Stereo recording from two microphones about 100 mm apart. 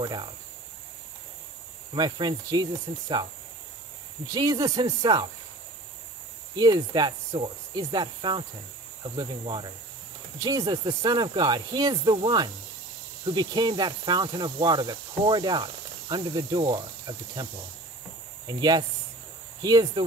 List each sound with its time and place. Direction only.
0.0 s speech: 50° right (ahead or behind)
2.0 s speech: 45° right (ahead or behind)
4.3 s speech: 40° right (ahead or behind)
6.5 s speech: 45° right (ahead or behind)
13.3 s speech: 45° right (ahead or behind)
18.5 s speech: 45° right (ahead or behind)